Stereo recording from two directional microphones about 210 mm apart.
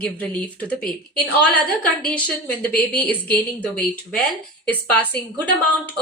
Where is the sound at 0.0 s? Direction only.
5° left (ahead or behind).